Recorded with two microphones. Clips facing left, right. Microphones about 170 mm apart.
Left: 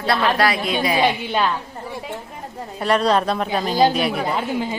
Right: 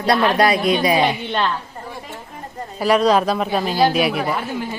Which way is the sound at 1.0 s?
5° left (ahead or behind).